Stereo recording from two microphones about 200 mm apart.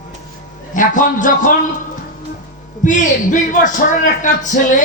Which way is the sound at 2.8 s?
40° left (ahead or behind).